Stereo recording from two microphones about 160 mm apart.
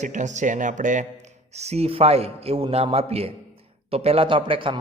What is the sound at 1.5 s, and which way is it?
A man's voice, 40° right (ahead or behind).